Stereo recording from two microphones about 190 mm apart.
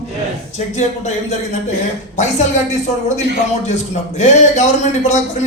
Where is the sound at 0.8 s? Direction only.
35° left (ahead or behind).